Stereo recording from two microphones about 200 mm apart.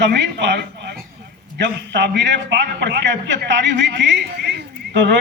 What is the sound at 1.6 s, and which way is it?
A man's voice, 60° right (ahead or behind).